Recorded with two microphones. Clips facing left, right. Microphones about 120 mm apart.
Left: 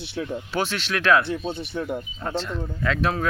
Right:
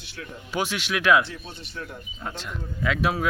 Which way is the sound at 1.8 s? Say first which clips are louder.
Left 8 dB; 55° left (ahead or behind).